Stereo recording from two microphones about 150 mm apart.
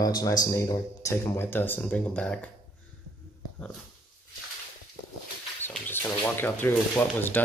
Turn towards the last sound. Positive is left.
turn(degrees=15)  # may be behind; listen again after turning